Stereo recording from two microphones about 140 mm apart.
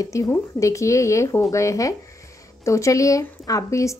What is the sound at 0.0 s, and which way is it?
A woman's voice, 20° left (ahead or behind).